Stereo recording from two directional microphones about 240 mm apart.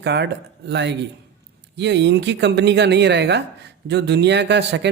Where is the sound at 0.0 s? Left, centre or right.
Right.